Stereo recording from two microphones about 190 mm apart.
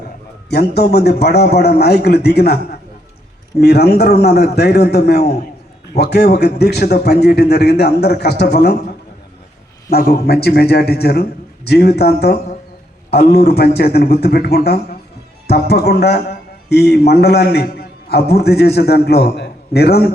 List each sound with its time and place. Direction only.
0.5 s a man's voice: 60° left (ahead or behind)
3.6 s a man's voice: 60° left (ahead or behind)
9.9 s a man's voice: 55° left (ahead or behind)